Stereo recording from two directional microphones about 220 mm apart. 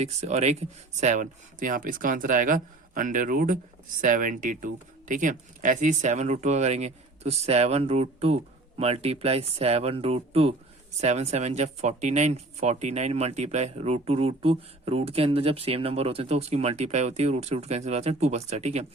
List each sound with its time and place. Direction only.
0.0 s speech: 30° right (ahead or behind)